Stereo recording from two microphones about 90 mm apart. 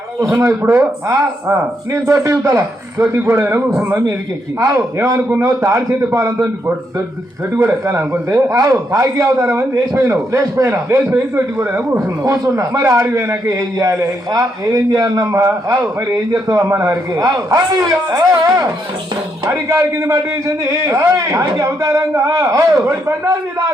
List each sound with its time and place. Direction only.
0.3 s a man's voice: 25° right (ahead or behind)
4.6 s a man's voice: 35° right (ahead or behind)
6.1 s a man's voice: 40° right (ahead or behind)
7.5 s a man's voice: 25° right (ahead or behind)
7.9 s a man's voice: 35° right (ahead or behind)
12.0 s a man's voice: 40° right (ahead or behind)
13.3 s a man's voice: 40° right (ahead or behind)
15.2 s a man's voice: 35° right (ahead or behind)